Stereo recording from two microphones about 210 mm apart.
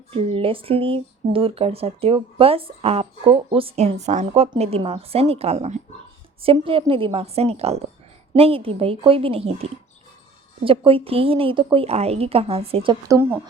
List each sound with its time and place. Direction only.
0.1 s speech: 25° right (ahead or behind)